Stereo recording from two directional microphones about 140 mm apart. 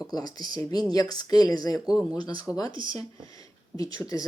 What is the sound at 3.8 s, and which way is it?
Speech, 25° left (ahead or behind).